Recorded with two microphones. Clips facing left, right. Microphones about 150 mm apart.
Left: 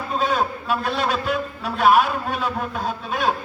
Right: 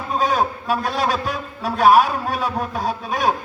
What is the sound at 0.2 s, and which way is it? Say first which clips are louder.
A man's voice: right 2 dB; 40° right (ahead or behind).